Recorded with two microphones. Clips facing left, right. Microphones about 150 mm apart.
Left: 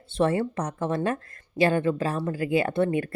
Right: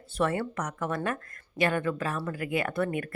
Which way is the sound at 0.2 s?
25° left (ahead or behind).